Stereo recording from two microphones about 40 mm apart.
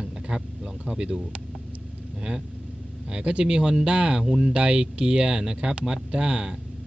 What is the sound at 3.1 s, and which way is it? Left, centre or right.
Speech, right.